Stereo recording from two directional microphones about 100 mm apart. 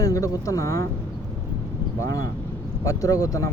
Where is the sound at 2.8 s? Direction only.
35° left (ahead or behind).